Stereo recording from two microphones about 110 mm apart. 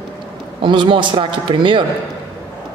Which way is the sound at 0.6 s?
45° right (ahead or behind).